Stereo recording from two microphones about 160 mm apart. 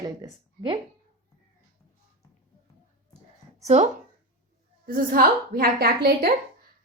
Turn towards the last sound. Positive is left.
turn(degrees=-75)  # may be behind; listen again after turning